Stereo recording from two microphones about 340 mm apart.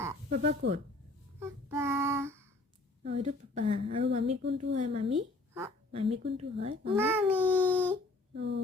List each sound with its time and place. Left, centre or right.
0.3 s speech: right
1.4 s child singing: centre
3.0 s a woman's voice: centre
6.9 s a sound: centre
8.4 s speech: right